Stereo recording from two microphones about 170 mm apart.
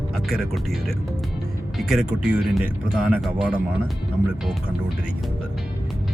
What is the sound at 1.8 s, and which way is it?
Speech, centre (ahead or behind).